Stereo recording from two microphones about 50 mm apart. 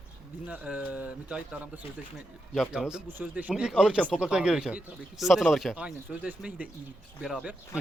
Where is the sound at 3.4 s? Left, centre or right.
Right.